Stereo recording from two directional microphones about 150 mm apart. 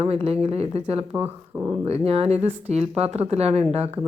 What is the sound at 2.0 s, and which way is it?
A woman's voice, 45° right (ahead or behind).